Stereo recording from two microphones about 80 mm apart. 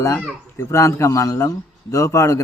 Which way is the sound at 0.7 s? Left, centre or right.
Left.